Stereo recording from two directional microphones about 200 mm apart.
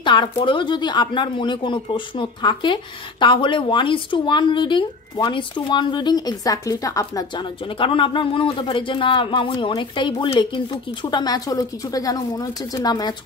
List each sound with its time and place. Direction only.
0.0 s speech: 25° left (ahead or behind)